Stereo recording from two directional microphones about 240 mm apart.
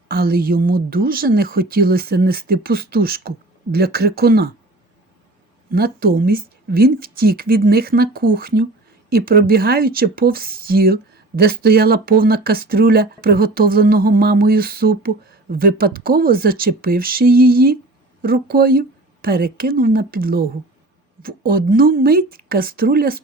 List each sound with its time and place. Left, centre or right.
0.1 s speech: right
5.7 s speech: right